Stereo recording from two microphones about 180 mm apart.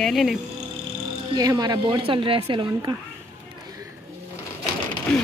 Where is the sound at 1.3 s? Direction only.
20° right (ahead or behind).